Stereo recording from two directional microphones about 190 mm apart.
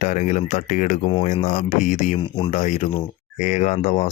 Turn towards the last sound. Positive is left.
turn(degrees=40)  # may be behind; listen again after turning